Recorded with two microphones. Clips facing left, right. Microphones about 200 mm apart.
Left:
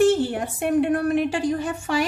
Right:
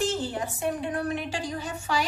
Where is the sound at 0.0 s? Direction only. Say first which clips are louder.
Left 9 dB; 60° left (ahead or behind).